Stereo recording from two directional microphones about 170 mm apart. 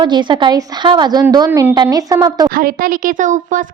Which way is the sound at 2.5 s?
55° right (ahead or behind).